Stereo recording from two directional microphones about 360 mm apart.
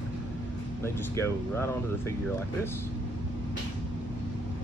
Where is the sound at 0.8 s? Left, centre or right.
Centre.